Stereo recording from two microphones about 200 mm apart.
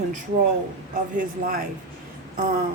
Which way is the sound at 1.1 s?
45° right (ahead or behind).